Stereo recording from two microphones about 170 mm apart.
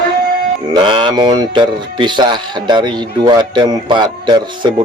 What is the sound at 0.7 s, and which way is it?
Speech, 25° right (ahead or behind).